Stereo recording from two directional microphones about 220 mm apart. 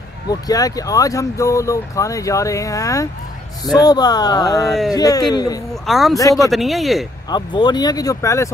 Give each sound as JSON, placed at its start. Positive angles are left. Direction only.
{"t": 0.3, "sound": "speech", "side_deg": 15}
{"t": 4.6, "sound": "speech", "side_deg": 0}
{"t": 4.9, "sound": "speech", "side_deg": 15}
{"t": 5.9, "sound": "speech", "side_deg": 0}
{"t": 7.2, "sound": "speech", "side_deg": 20}